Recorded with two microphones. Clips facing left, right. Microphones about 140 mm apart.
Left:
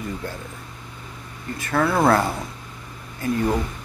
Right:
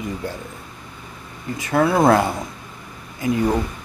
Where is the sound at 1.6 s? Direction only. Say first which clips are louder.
Right 3 dB; 15° right (ahead or behind).